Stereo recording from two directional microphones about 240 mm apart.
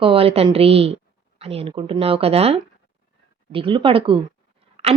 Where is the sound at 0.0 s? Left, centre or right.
Right.